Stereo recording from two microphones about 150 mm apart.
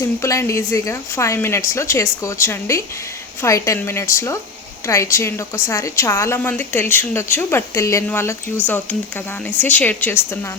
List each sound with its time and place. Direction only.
0.2 s a woman's voice: 20° left (ahead or behind)